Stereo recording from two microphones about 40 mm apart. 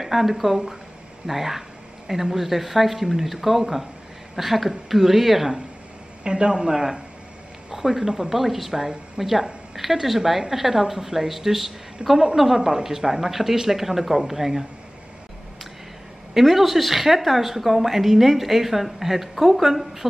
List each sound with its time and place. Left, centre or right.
0.0 s a woman's voice: centre
6.2 s a man's voice: right
8.4 s a woman's voice: centre
12.0 s a man's voice: right
12.4 s a woman's voice: centre
16.3 s a woman's voice: centre